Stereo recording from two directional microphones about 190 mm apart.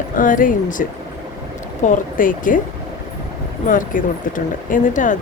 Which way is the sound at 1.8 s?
45° left (ahead or behind).